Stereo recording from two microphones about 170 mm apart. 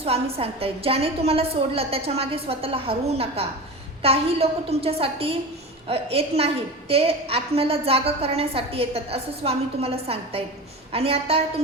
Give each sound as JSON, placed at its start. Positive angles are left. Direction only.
{"t": 0.0, "sound": "a woman's voice", "side_deg": -35}